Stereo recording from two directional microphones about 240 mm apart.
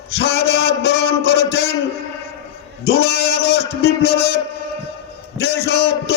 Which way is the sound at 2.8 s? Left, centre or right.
Left.